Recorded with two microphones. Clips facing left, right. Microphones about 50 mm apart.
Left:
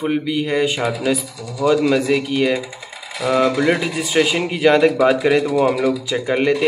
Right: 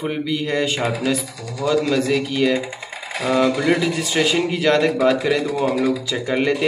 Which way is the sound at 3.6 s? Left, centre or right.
Left.